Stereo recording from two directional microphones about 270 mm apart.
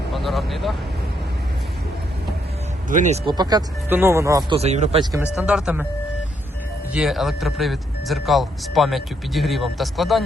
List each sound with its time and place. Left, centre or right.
0.1 s speech: centre
2.9 s speech: right
5.2 s speech: centre
6.9 s speech: centre